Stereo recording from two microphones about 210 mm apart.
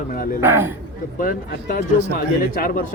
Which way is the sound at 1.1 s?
45° left (ahead or behind).